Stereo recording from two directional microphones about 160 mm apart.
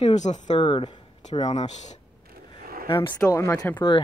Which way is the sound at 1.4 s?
45° left (ahead or behind).